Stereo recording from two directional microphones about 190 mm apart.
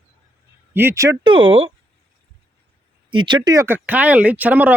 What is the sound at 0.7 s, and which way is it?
Speech, 10° right (ahead or behind).